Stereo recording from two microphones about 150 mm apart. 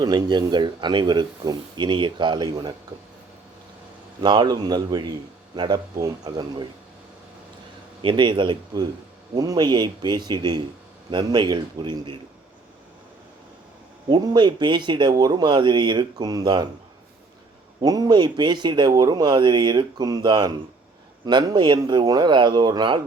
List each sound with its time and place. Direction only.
0.0 s speech: 25° right (ahead or behind)
4.2 s speech: 30° right (ahead or behind)
8.0 s speech: 30° right (ahead or behind)
14.1 s speech: 30° right (ahead or behind)
17.7 s speech: 25° right (ahead or behind)